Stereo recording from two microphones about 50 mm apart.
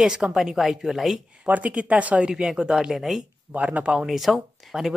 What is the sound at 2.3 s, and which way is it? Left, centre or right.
Speech, centre.